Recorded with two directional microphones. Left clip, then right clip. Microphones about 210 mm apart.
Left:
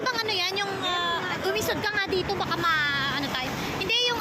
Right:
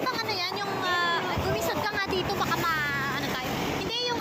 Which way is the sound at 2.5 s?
35° left (ahead or behind).